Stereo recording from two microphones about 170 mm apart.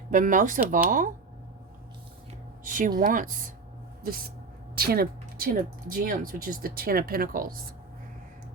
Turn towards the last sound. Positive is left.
turn(degrees=-55)  # may be behind; listen again after turning